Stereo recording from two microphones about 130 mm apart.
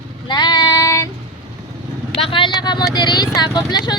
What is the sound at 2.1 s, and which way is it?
Speech, 45° left (ahead or behind).